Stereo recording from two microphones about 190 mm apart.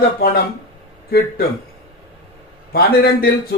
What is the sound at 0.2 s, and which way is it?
Speech, 50° left (ahead or behind).